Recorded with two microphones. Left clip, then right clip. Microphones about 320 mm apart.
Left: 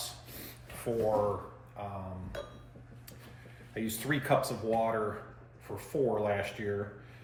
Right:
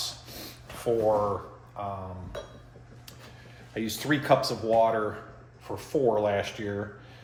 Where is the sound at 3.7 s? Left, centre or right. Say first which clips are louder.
Right 6 dB; centre.